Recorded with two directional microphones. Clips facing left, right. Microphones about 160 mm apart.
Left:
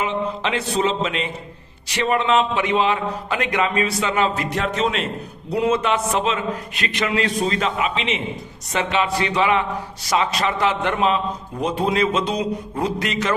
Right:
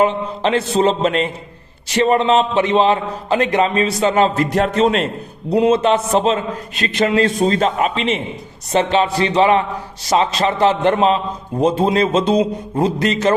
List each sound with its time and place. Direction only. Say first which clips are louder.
0.0 s a man's voice: right 6 dB; 35° right (ahead or behind)
5.5 s a man's voice: right 6 dB; 25° right (ahead or behind)
11.6 s a sound: right 5 dB; 25° right (ahead or behind)